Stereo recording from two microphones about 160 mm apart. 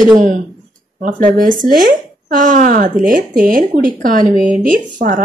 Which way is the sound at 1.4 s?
55° right (ahead or behind).